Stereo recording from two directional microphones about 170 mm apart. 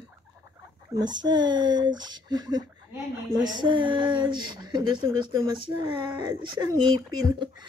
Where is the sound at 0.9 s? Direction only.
25° right (ahead or behind).